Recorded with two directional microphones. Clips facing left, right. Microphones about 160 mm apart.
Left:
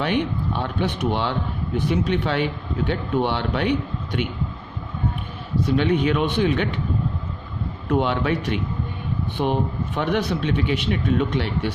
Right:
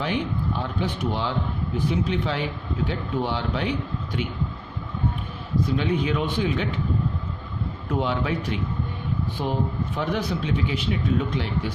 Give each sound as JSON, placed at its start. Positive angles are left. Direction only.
{"t": 0.0, "sound": "speech", "side_deg": 65}
{"t": 5.6, "sound": "speech", "side_deg": 70}
{"t": 7.9, "sound": "speech", "side_deg": 70}